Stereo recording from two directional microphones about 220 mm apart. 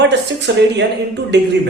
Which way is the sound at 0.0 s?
50° right (ahead or behind).